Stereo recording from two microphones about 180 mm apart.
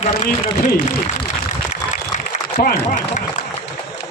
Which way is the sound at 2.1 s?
55° left (ahead or behind).